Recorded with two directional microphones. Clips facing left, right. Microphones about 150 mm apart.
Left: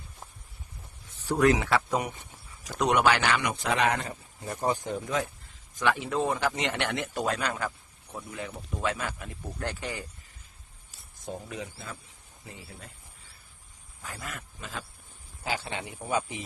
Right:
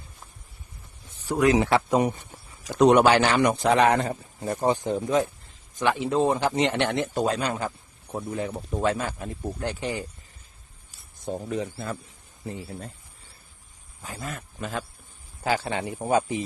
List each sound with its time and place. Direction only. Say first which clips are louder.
1.3 s a man's voice: right 1 dB; 10° right (ahead or behind)
1.5 s a man's voice: right 6 dB; 25° right (ahead or behind)
11.3 s a man's voice: right 8 dB; 40° right (ahead or behind)
14.0 s speech: right 4 dB; 25° right (ahead or behind)
14.6 s a man's voice: right 9 dB; 50° right (ahead or behind)
15.6 s a man's voice: right 8 dB; 40° right (ahead or behind)